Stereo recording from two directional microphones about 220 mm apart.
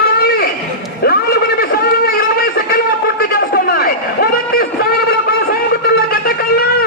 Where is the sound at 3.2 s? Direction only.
45° left (ahead or behind).